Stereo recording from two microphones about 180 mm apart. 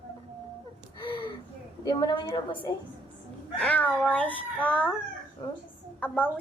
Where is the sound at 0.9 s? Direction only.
25° left (ahead or behind).